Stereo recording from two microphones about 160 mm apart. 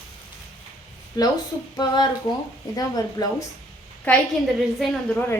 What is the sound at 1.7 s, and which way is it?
A woman's voice, 25° left (ahead or behind).